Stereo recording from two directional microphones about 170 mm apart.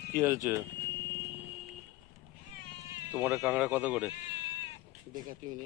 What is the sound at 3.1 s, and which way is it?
Speech, 10° right (ahead or behind).